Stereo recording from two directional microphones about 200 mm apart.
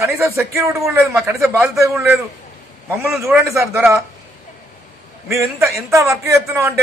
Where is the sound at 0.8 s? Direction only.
Centre (ahead or behind).